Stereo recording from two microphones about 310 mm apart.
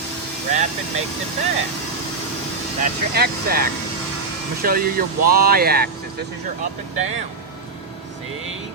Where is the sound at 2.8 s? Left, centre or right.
Right.